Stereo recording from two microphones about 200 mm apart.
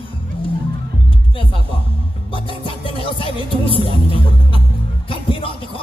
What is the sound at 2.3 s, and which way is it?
Speech, 25° left (ahead or behind).